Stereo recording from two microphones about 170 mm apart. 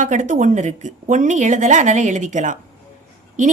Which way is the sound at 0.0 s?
45° right (ahead or behind).